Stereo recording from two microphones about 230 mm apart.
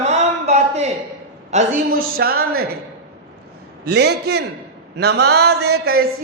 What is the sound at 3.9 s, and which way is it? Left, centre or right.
A man's voice, right.